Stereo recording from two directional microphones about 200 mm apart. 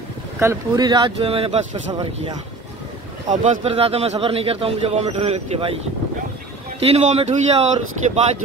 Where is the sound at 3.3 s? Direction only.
35° right (ahead or behind).